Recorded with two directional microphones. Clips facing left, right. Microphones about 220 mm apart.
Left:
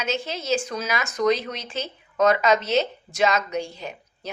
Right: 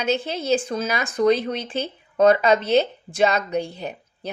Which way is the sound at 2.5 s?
55° right (ahead or behind).